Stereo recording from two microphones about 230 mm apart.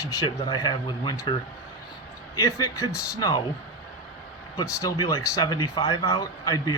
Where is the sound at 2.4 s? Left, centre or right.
Centre.